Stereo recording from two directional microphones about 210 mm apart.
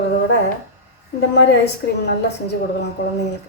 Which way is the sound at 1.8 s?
50° left (ahead or behind).